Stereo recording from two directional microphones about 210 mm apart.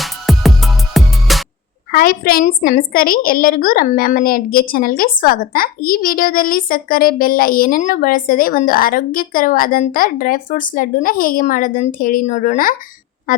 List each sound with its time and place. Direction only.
0.0 s music: centre (ahead or behind)
1.9 s a woman's voice: 45° left (ahead or behind)